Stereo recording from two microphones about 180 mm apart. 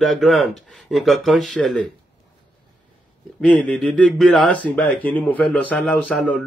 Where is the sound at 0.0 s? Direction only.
Centre (ahead or behind).